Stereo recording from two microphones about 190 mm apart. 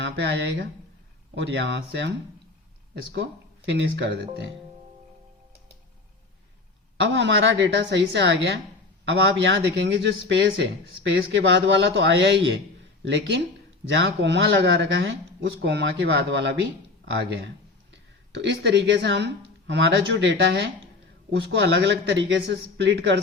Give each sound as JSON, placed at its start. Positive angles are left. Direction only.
{"t": 0.0, "sound": "a man's voice", "side_deg": -65}
{"t": 6.9, "sound": "speech", "side_deg": -70}
{"t": 13.8, "sound": "a man's voice", "side_deg": -70}